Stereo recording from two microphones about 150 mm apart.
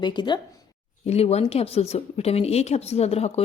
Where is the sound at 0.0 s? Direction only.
30° left (ahead or behind).